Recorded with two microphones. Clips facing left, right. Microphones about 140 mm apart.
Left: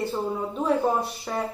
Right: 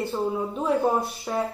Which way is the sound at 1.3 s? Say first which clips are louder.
Right 3 dB; 10° right (ahead or behind).